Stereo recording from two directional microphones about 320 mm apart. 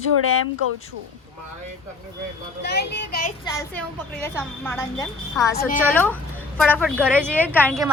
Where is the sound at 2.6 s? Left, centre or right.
Left.